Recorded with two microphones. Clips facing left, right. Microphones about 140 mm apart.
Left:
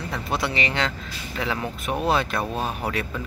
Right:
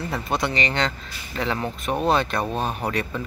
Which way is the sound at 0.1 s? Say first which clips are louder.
Right 1 dB; centre (ahead or behind).